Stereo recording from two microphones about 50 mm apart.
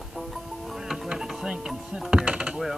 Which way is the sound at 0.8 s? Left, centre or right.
Centre.